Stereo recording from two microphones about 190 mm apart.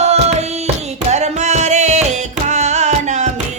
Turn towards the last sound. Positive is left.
turn(degrees=-40)  # may be behind; listen again after turning